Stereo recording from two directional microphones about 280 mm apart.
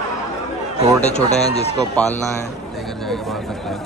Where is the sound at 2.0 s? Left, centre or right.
Centre.